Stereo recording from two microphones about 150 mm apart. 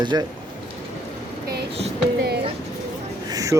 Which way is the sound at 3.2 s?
25° right (ahead or behind).